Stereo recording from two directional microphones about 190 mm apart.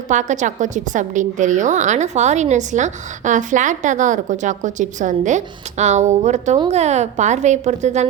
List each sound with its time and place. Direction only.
0.1 s a woman's voice: 40° right (ahead or behind)